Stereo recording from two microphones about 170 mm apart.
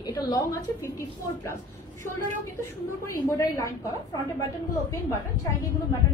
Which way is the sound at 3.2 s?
15° left (ahead or behind).